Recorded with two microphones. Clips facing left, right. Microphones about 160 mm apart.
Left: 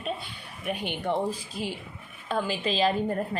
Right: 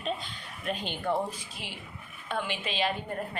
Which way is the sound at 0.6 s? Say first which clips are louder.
Left 2 dB; 15° left (ahead or behind).